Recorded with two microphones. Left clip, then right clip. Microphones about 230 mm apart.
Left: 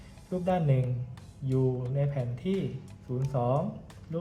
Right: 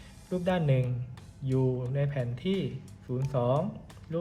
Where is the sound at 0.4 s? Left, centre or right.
Right.